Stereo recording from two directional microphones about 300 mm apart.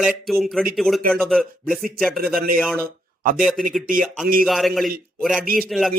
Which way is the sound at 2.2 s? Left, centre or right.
Right.